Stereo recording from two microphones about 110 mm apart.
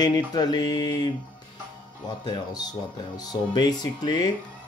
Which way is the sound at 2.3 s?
40° left (ahead or behind).